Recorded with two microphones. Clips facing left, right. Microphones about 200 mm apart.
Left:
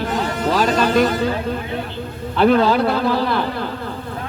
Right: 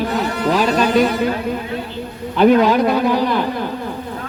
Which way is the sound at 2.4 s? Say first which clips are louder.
Right 2 dB; 15° right (ahead or behind).